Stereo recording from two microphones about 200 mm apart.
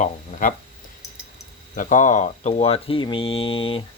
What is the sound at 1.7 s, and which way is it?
A man's voice, 40° left (ahead or behind).